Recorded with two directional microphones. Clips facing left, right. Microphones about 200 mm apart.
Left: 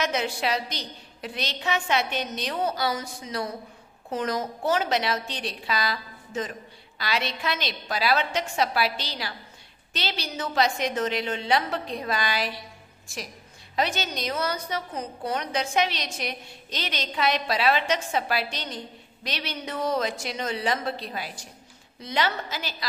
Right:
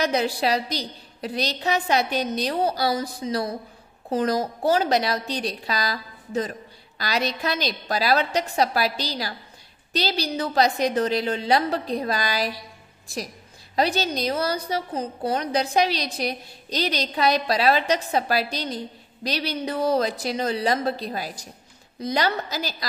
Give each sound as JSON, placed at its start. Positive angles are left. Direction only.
{"t": 0.0, "sound": "a woman's voice", "side_deg": -35}